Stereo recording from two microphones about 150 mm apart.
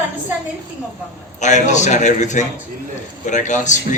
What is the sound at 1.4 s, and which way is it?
A man's voice, 50° left (ahead or behind).